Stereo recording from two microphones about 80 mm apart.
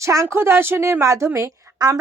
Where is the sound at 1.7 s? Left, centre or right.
Right.